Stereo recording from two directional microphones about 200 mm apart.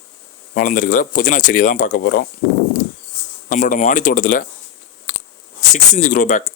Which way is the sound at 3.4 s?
40° left (ahead or behind).